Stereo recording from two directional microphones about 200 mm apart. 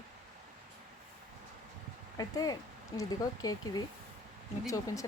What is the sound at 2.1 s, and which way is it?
Speech, 20° left (ahead or behind).